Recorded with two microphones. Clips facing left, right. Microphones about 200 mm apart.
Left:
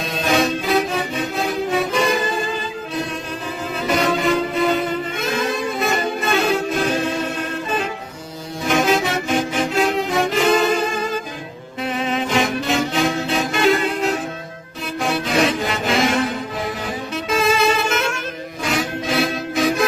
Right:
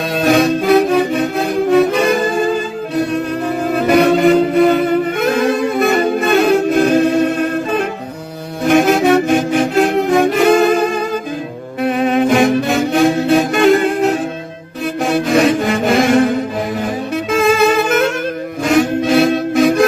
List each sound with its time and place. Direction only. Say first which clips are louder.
0.1 s music: right 7 dB; 55° right (ahead or behind)
8.6 s music: right 7 dB; 55° right (ahead or behind)
15.1 s music: right 7 dB; 50° right (ahead or behind)